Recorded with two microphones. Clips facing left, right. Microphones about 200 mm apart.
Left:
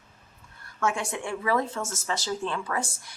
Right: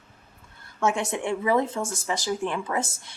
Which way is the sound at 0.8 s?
20° right (ahead or behind).